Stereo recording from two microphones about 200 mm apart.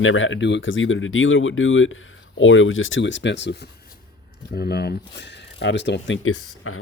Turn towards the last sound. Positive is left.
turn(degrees=90)